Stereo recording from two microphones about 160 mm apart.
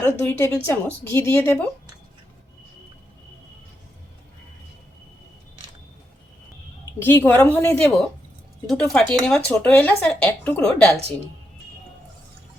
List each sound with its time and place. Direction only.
0.0 s speech: 15° left (ahead or behind)
7.0 s speech: 15° left (ahead or behind)